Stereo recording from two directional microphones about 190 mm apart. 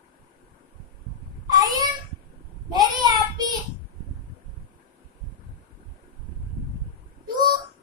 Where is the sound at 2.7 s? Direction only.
20° right (ahead or behind).